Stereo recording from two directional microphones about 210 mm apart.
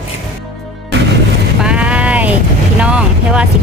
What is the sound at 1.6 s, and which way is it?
Sheep, 5° right (ahead or behind).